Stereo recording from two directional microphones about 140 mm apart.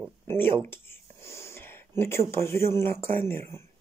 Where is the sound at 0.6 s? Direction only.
15° left (ahead or behind).